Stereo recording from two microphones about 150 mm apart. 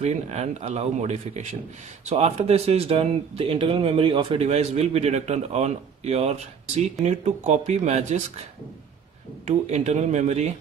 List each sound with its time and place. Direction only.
0.0 s speech: 45° right (ahead or behind)
9.5 s speech: 50° right (ahead or behind)